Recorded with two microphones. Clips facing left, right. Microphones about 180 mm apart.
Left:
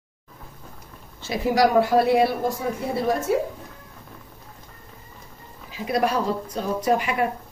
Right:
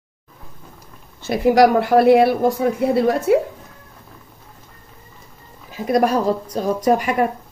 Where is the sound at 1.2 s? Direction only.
60° right (ahead or behind).